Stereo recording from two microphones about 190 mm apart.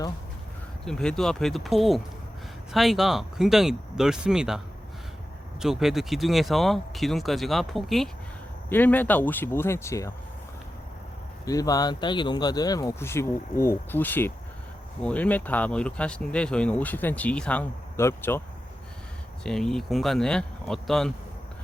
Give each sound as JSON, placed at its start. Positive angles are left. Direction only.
{"t": 0.9, "sound": "speech", "side_deg": 5}
{"t": 11.4, "sound": "speech", "side_deg": 20}
{"t": 19.5, "sound": "speech", "side_deg": 0}